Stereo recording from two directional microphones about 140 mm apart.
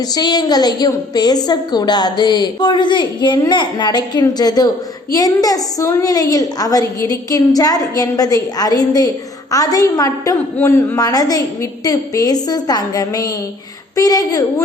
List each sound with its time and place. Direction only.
0.1 s a woman's voice: 30° left (ahead or behind)